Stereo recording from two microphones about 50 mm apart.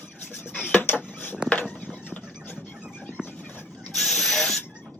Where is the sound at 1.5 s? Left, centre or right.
Left.